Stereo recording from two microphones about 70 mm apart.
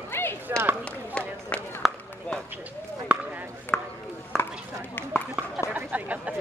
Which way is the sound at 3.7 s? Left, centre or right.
Centre.